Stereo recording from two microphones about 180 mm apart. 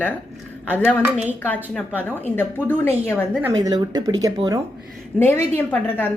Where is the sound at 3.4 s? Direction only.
20° right (ahead or behind).